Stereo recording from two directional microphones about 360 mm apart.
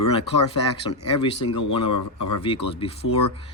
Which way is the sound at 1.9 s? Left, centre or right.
Left.